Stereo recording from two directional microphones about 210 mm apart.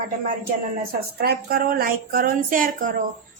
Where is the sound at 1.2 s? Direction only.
50° right (ahead or behind).